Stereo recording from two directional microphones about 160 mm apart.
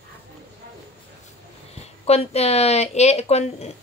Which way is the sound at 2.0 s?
40° left (ahead or behind).